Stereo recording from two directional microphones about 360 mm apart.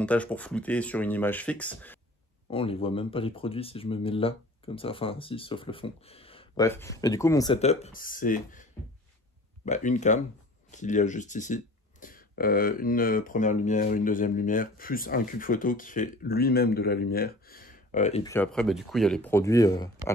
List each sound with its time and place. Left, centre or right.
0.0 s speech: centre
2.4 s speech: centre
9.7 s speech: centre
18.3 s speech: centre